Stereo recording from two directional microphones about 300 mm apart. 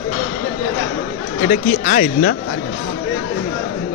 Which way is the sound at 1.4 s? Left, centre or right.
Left.